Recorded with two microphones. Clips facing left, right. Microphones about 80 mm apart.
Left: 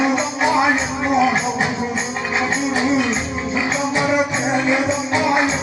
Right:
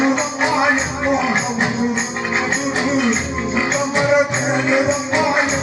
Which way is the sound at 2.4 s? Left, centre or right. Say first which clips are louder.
Left 2 dB; right.